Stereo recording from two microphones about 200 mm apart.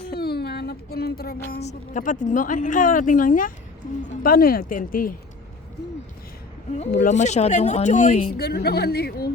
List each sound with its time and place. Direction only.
0.1 s a sound: 50° left (ahead or behind)
1.6 s speech: 40° left (ahead or behind)
6.9 s speech: 40° left (ahead or behind)
8.4 s speech: 55° left (ahead or behind)